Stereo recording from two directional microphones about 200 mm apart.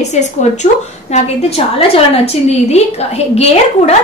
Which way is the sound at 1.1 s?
30° left (ahead or behind).